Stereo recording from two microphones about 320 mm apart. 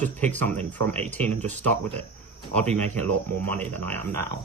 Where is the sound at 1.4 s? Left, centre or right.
Right.